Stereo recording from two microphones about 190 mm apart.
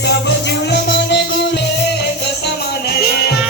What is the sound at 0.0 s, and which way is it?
Music, 60° left (ahead or behind).